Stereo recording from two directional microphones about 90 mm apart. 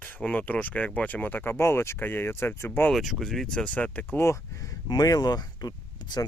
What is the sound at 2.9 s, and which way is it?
Speech, centre (ahead or behind).